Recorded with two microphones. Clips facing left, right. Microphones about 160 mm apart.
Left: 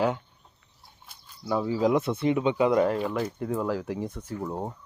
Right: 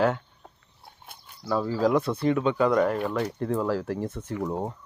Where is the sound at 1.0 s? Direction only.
55° right (ahead or behind).